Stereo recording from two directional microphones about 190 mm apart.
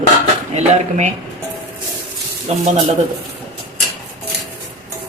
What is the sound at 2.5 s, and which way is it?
Speech, 35° right (ahead or behind).